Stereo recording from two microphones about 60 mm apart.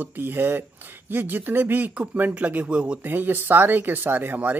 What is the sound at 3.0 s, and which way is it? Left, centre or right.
Speech, right.